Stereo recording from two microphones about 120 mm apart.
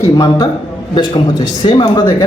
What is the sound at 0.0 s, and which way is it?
A man's voice, 30° left (ahead or behind).